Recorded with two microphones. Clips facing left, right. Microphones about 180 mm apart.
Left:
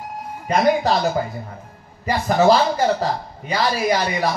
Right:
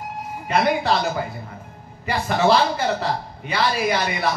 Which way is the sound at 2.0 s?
40° left (ahead or behind).